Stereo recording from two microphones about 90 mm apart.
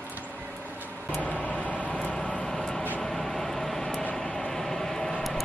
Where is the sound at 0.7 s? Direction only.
20° right (ahead or behind).